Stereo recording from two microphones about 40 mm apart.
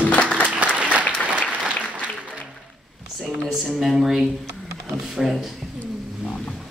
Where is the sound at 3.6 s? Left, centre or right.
Centre.